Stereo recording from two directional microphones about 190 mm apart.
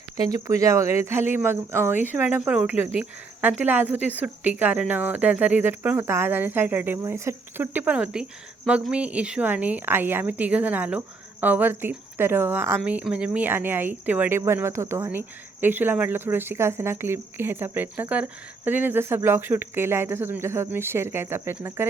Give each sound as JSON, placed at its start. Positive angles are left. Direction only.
{"t": 0.3, "sound": "speech", "side_deg": -15}